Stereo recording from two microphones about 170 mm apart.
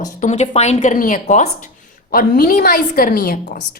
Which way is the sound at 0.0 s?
45° left (ahead or behind).